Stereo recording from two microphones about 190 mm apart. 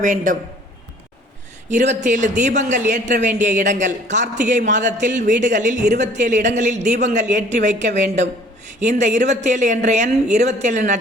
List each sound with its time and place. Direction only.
0.0 s a man's voice: 40° right (ahead or behind)
1.7 s a woman's voice: 40° right (ahead or behind)